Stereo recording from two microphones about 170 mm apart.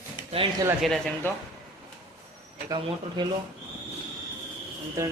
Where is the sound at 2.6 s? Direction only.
25° right (ahead or behind).